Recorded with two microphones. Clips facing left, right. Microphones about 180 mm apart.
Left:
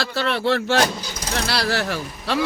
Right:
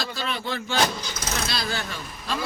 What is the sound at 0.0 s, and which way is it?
Speech, 75° left (ahead or behind).